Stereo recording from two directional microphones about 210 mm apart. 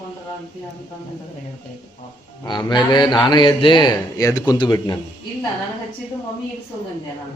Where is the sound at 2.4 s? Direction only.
20° left (ahead or behind).